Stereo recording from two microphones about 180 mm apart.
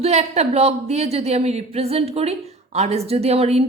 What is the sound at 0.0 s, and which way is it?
A woman's voice, 35° right (ahead or behind).